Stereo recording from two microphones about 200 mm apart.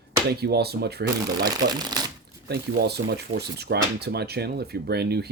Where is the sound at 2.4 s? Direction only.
55° right (ahead or behind).